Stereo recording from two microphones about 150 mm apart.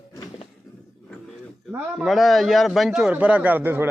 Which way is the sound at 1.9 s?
Centre (ahead or behind).